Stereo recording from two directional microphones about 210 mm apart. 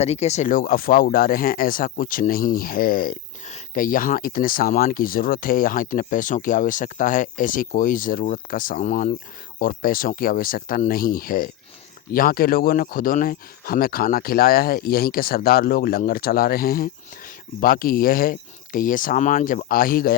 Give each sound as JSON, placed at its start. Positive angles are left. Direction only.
{"t": 0.0, "sound": "speech", "side_deg": 30}